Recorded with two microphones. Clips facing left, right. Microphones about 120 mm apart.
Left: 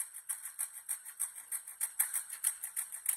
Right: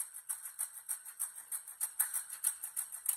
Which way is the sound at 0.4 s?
65° left (ahead or behind).